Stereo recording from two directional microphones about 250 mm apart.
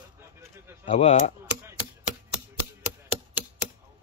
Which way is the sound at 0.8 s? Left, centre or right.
Left.